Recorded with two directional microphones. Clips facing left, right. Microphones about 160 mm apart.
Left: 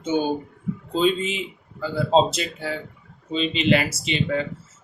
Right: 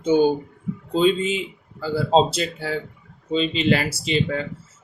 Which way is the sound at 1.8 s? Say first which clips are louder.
Right 1 dB; 35° right (ahead or behind).